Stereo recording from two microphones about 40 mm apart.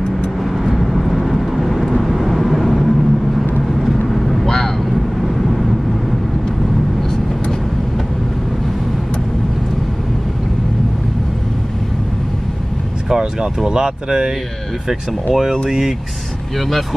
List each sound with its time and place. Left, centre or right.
0.4 s vehicle: centre
5.2 s vehicle: centre
13.1 s vehicle: centre
13.7 s speech: centre
16.5 s speech: centre